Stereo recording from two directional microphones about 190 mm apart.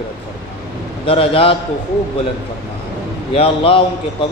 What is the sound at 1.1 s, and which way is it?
Speech, 30° left (ahead or behind).